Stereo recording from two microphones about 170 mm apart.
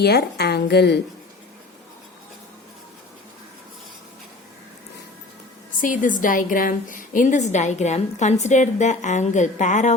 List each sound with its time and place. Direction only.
0.0 s a woman's voice: 70° left (ahead or behind)
5.8 s a woman's voice: 50° left (ahead or behind)